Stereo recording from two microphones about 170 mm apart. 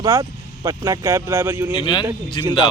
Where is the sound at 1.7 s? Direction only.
30° left (ahead or behind).